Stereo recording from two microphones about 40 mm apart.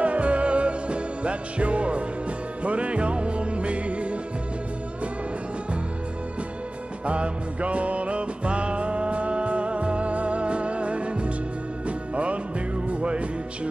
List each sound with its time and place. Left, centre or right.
0.0 s music: right
7.1 s music: right
12.8 s music: right